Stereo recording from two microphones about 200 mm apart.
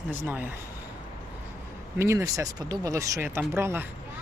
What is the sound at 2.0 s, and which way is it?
Speech, 15° right (ahead or behind).